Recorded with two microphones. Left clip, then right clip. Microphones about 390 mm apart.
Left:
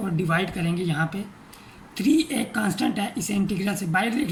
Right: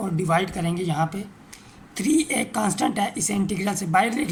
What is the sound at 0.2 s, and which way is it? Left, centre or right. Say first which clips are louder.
Speech: right 3 dB; centre.